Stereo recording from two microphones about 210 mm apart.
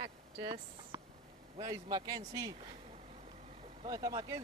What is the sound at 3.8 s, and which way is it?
Speech, 15° right (ahead or behind).